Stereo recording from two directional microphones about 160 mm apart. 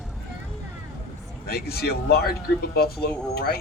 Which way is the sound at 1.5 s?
75° left (ahead or behind).